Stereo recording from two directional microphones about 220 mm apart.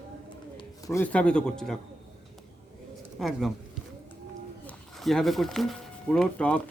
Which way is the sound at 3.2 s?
Centre (ahead or behind).